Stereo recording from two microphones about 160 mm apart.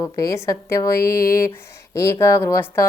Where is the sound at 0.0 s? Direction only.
20° left (ahead or behind).